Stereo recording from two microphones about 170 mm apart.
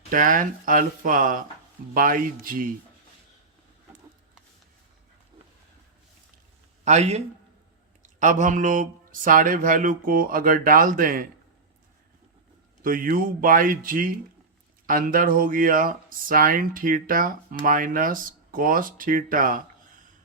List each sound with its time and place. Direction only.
0.1 s speech: 50° right (ahead or behind)
6.8 s a man's voice: 40° right (ahead or behind)
12.8 s speech: 55° right (ahead or behind)